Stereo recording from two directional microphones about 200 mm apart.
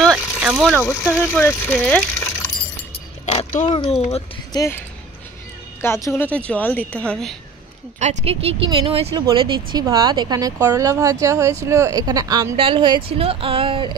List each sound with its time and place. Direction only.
0.0 s a sound: 5° right (ahead or behind)
0.8 s speech: 5° left (ahead or behind)
3.3 s a sound: 35° left (ahead or behind)
4.5 s speech: 20° left (ahead or behind)
5.8 s speech: 15° left (ahead or behind)
8.0 s speech: 30° right (ahead or behind)